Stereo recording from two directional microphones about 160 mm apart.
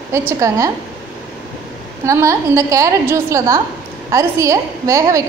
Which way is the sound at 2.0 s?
20° right (ahead or behind).